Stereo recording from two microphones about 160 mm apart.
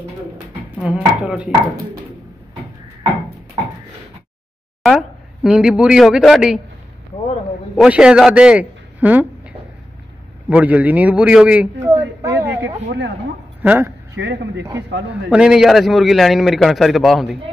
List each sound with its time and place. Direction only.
0.8 s a man's voice: 5° right (ahead or behind)
4.8 s speech: 5° right (ahead or behind)
7.7 s a man's voice: 5° right (ahead or behind)
10.5 s a man's voice: 10° right (ahead or behind)
12.0 s a sound: 20° right (ahead or behind)
13.6 s a man's voice: 15° right (ahead or behind)
14.1 s speech: 90° right
14.6 s a man's voice: 15° right (ahead or behind)
15.2 s a man's voice: 5° right (ahead or behind)